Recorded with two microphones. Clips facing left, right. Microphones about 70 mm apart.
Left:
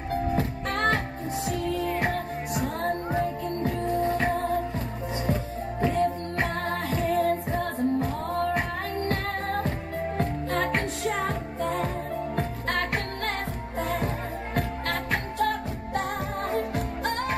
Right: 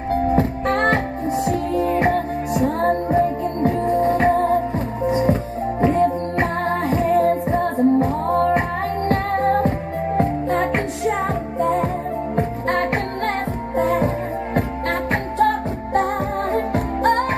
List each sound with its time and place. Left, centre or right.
0.3 s music: right